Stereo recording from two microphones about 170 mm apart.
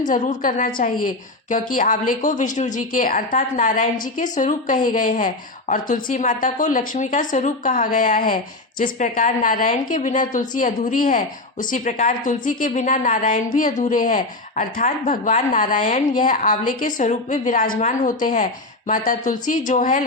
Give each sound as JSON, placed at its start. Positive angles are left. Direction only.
{"t": 0.1, "sound": "a woman's voice", "side_deg": 50}